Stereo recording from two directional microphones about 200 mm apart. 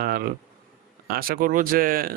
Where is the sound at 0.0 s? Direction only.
50° right (ahead or behind).